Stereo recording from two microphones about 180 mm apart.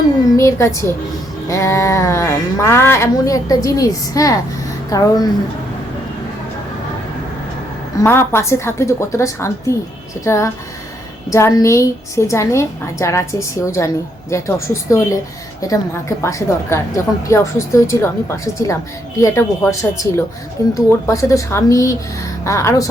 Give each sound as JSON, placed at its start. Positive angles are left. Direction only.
{"t": 0.3, "sound": "a woman's voice", "side_deg": 15}
{"t": 8.0, "sound": "a woman's voice", "side_deg": 15}